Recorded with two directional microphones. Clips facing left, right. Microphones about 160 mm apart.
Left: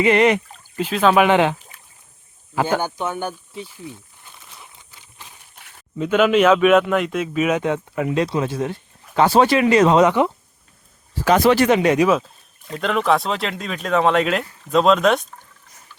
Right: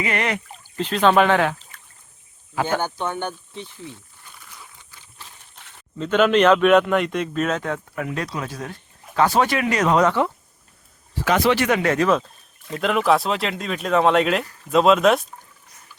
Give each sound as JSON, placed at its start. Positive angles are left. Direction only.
{"t": 0.0, "sound": "speech", "side_deg": 20}
{"t": 0.8, "sound": "speech", "side_deg": 5}
{"t": 1.3, "sound": "speech", "side_deg": 20}
{"t": 2.6, "sound": "speech", "side_deg": 10}
{"t": 4.2, "sound": "a sound", "side_deg": 20}
{"t": 9.1, "sound": "speech", "side_deg": 25}
{"t": 11.3, "sound": "speech", "side_deg": 40}
{"t": 11.7, "sound": "speech", "side_deg": 20}